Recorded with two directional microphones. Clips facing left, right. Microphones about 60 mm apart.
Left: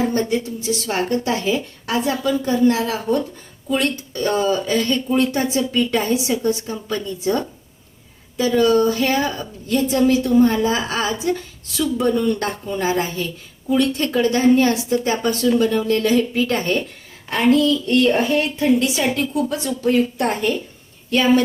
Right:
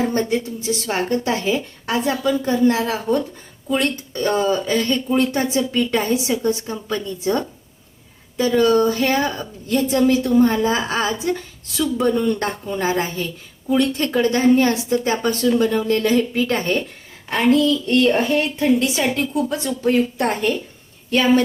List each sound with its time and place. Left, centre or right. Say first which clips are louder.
0.1 s speech: even; right